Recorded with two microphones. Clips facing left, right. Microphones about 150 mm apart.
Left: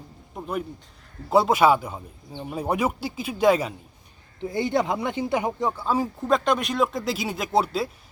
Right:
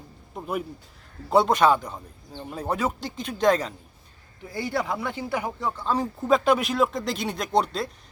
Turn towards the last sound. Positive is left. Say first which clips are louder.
# left 1 dB
turn(degrees=5)  # may be behind; listen again after turning